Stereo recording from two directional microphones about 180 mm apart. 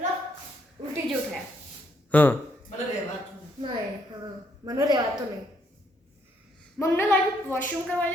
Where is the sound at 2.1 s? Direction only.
10° left (ahead or behind).